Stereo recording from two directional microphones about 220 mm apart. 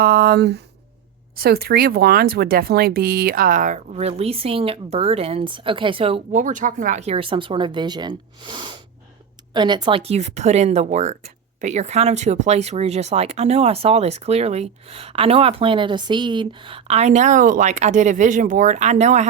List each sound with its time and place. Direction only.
0.0 s speech: 40° right (ahead or behind)